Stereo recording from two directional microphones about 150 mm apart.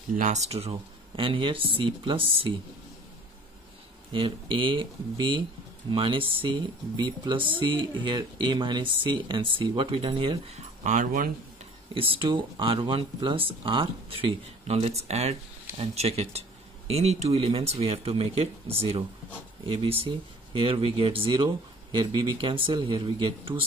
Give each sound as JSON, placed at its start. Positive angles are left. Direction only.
{"t": 0.1, "sound": "speech", "side_deg": -55}
{"t": 4.1, "sound": "speech", "side_deg": -35}
{"t": 10.8, "sound": "speech", "side_deg": -55}
{"t": 11.9, "sound": "speech", "side_deg": -35}